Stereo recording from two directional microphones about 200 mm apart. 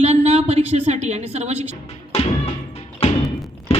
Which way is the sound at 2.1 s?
30° left (ahead or behind).